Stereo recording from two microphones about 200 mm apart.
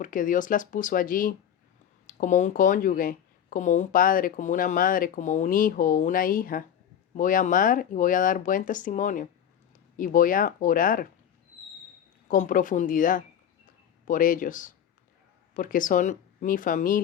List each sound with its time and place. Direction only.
0.0 s speech: 40° left (ahead or behind)
12.3 s speech: 40° left (ahead or behind)